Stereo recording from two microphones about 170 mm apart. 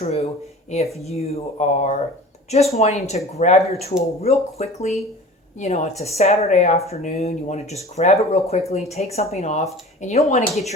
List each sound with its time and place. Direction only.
0.0 s speech: 40° left (ahead or behind)